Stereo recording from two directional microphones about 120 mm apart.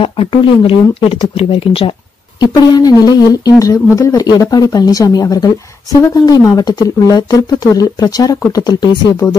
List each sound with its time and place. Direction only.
0.0 s speech: 50° left (ahead or behind)
2.4 s speech: 35° left (ahead or behind)